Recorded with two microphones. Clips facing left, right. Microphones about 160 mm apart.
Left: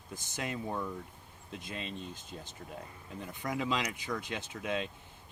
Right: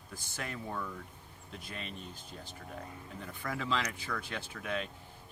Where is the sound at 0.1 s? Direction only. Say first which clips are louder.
Left 4 dB; 20° left (ahead or behind).